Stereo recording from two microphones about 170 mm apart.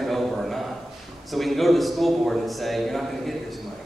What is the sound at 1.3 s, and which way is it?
A woman's voice, centre (ahead or behind).